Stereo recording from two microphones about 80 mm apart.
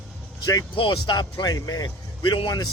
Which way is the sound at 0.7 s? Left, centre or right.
Left.